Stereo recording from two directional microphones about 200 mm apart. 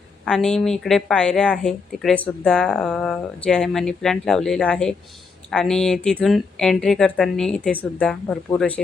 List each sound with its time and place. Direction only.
0.3 s speech: centre (ahead or behind)